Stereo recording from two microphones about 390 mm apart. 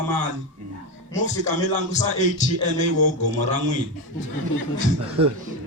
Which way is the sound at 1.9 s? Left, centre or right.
Centre.